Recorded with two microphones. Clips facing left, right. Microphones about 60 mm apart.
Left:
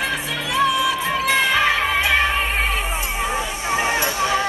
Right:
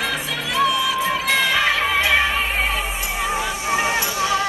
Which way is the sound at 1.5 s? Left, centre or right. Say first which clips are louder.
Left 1 dB; centre.